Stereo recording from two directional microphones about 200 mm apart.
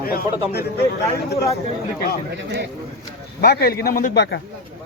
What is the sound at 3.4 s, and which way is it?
Speech, 50° left (ahead or behind).